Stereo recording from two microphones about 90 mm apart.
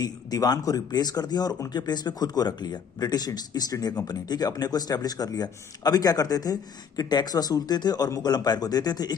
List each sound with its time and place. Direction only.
0.0 s speech: 45° left (ahead or behind)